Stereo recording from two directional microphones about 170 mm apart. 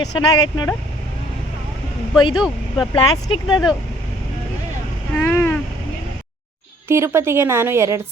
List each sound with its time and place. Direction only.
0.0 s speech: 25° left (ahead or behind)
2.3 s speech: 5° right (ahead or behind)
2.9 s speech: 30° left (ahead or behind)
5.1 s a sound: 10° left (ahead or behind)
6.8 s a woman's voice: 15° right (ahead or behind)